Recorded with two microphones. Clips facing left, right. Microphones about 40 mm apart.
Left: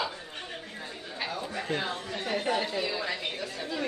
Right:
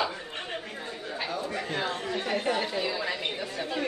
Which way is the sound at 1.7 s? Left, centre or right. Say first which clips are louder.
Left 1 dB; right.